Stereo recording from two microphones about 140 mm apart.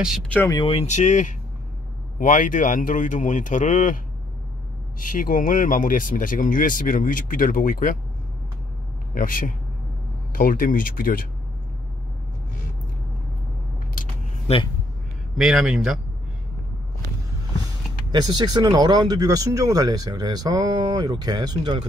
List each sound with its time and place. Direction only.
0.0 s speech: 5° right (ahead or behind)
0.5 s speech: 40° left (ahead or behind); by 4.0 s 65° left (ahead or behind)
5.0 s speech: 75° left (ahead or behind)
9.1 s speech: 85° left
14.5 s speech: 50° left (ahead or behind)
15.3 s speech: 5° right (ahead or behind)
18.1 s speech: 30° right (ahead or behind)